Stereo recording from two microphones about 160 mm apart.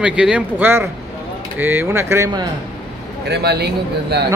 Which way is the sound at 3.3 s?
90° right.